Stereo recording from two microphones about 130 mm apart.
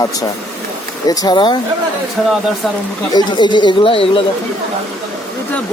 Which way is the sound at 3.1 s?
35° left (ahead or behind).